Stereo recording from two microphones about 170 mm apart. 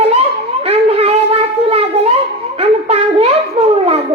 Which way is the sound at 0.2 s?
35° right (ahead or behind).